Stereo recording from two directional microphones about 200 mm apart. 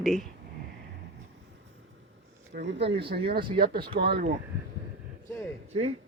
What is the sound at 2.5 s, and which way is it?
Speech, 60° right (ahead or behind).